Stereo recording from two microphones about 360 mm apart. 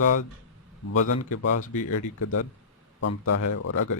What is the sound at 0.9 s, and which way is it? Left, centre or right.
A man's voice, left.